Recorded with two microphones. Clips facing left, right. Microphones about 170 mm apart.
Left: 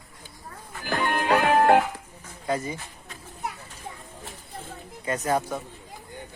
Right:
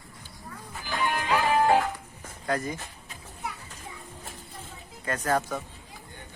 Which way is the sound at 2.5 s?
5° left (ahead or behind).